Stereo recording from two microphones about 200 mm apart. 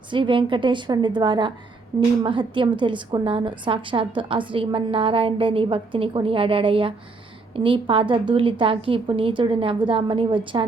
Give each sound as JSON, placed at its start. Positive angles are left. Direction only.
{"t": 0.1, "sound": "a woman's voice", "side_deg": -25}